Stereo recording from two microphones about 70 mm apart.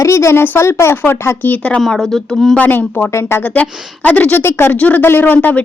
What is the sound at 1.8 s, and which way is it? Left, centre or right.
Speech, centre.